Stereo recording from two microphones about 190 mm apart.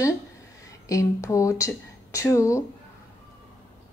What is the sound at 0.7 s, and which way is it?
A woman's voice, 15° left (ahead or behind).